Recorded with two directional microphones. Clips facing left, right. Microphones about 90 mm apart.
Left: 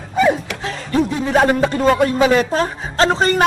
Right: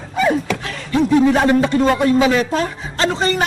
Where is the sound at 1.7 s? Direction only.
40° left (ahead or behind).